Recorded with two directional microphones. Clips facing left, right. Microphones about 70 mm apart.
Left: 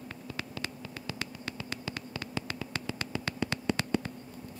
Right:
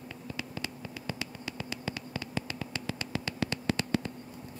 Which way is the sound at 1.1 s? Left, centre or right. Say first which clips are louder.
Even; left.